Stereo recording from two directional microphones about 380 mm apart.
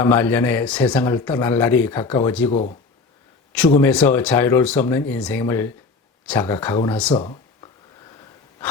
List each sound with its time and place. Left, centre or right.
0.0 s speech: centre
2.5 s speech: centre
3.5 s speech: centre
7.2 s a sound: centre